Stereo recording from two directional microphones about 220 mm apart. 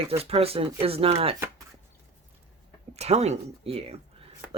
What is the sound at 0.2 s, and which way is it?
Speech, 25° right (ahead or behind).